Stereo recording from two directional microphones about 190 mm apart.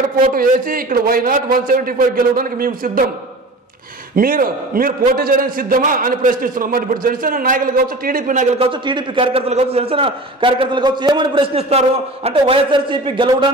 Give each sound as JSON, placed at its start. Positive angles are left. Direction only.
{"t": 0.2, "sound": "a man's voice", "side_deg": -45}
{"t": 4.1, "sound": "a man's voice", "side_deg": -50}